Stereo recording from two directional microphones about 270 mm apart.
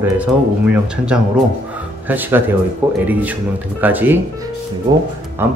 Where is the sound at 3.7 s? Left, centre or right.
Centre.